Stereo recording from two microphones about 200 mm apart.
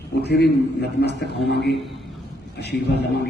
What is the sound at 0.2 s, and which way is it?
A man's voice, 55° left (ahead or behind).